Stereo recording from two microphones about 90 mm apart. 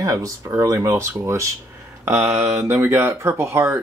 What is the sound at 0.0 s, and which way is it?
Speech, 40° right (ahead or behind).